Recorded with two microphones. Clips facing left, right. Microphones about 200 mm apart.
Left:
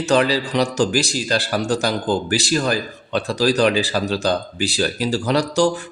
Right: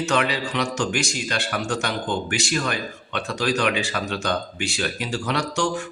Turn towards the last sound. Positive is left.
turn(degrees=35)  # may be behind; listen again after turning